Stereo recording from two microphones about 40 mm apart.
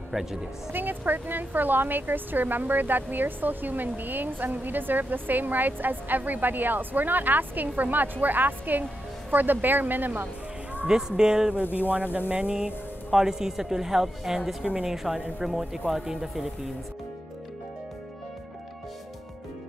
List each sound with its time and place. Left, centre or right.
0.1 s speech: centre
0.7 s a woman's voice: right
10.9 s a woman's voice: centre
11.6 s speech: left
11.9 s speech: right
12.4 s speech: right
13.1 s a woman's voice: centre